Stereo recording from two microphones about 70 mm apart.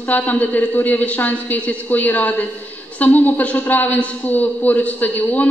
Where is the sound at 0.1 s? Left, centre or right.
Left.